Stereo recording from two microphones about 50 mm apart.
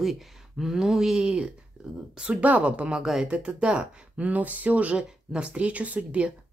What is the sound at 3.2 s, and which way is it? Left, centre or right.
Speech, right.